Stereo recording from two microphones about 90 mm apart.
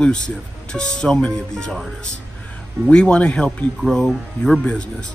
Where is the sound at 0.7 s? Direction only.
10° left (ahead or behind).